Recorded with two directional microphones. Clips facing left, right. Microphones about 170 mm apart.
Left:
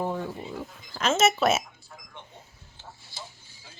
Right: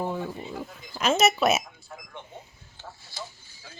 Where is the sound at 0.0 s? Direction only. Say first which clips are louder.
Even; 5° right (ahead or behind).